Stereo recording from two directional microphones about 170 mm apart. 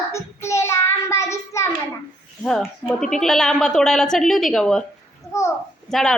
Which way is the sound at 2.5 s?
5° left (ahead or behind).